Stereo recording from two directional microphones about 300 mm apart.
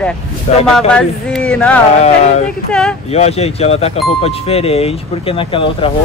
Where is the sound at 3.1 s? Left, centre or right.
Left.